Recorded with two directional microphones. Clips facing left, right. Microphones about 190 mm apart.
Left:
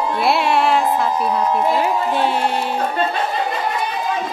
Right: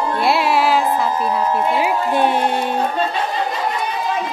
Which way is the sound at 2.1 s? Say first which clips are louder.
Right 2 dB; 15° right (ahead or behind).